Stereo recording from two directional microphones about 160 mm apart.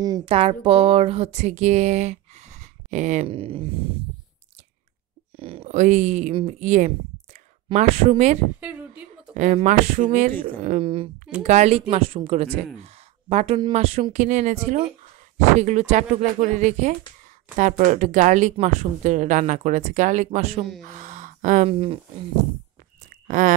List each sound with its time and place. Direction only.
0.2 s speech: 35° right (ahead or behind)
3.3 s speech: 35° right (ahead or behind)
5.4 s speech: 35° right (ahead or behind)
8.5 s a woman's voice: 10° right (ahead or behind)
9.3 s speech: 50° right (ahead or behind)
10.8 s speech: 35° right (ahead or behind)
11.4 s speech: 45° right (ahead or behind)
20.8 s a sound: 50° right (ahead or behind)
21.6 s speech: 35° right (ahead or behind)
23.2 s speech: 55° right (ahead or behind)